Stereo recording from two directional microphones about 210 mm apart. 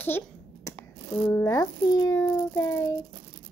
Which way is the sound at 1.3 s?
15° left (ahead or behind).